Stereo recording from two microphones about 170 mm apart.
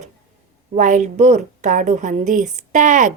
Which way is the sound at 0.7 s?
45° right (ahead or behind).